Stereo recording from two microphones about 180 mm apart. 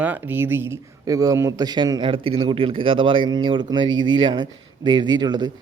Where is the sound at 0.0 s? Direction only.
10° right (ahead or behind).